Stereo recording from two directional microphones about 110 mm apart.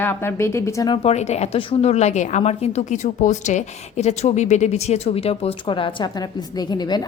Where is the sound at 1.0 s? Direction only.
85° left.